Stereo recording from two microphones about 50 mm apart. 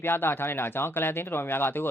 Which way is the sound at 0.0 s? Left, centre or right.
Left.